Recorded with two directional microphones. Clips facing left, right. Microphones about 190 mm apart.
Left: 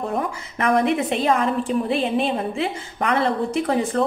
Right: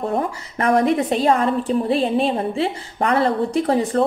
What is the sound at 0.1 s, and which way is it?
A woman's voice, 35° right (ahead or behind).